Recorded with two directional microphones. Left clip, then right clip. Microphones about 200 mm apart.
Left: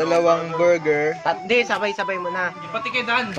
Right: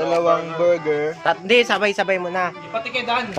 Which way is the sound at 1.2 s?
45° right (ahead or behind).